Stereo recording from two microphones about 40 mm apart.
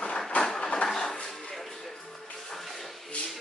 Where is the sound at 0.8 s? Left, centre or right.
Centre.